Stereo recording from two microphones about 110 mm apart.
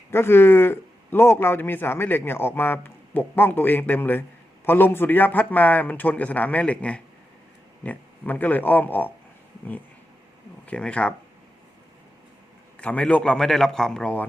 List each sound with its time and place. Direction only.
0.1 s a man's voice: 20° left (ahead or behind)
10.7 s a man's voice: 10° left (ahead or behind)
12.8 s a man's voice: 10° left (ahead or behind)